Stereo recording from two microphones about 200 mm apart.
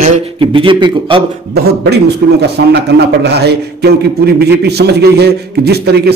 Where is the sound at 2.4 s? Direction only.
55° right (ahead or behind).